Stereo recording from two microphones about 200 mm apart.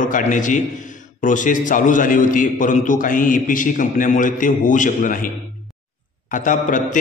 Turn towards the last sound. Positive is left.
turn(degrees=40)  # may be behind; listen again after turning